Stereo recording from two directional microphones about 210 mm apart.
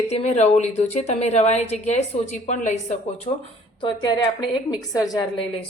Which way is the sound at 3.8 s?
20° left (ahead or behind).